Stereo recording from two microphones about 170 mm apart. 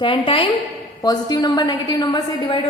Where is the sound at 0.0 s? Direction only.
30° left (ahead or behind).